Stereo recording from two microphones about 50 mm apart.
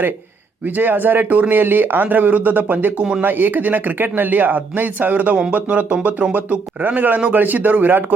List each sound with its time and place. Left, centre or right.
0.8 s speech: right